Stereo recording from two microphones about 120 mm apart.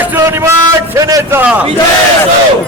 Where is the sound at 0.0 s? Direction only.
15° right (ahead or behind).